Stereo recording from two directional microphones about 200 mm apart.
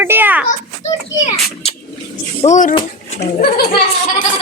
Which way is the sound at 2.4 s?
40° left (ahead or behind).